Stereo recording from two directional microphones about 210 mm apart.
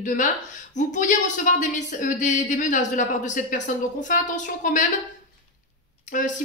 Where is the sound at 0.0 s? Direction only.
35° left (ahead or behind).